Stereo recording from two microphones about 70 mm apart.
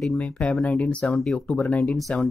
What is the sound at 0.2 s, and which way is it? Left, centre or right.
Speech, centre.